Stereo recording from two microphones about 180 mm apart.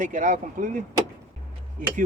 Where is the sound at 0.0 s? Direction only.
45° right (ahead or behind).